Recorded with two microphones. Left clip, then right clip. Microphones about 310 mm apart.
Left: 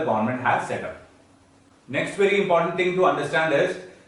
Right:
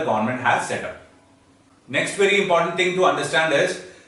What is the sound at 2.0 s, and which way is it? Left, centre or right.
Speech, centre.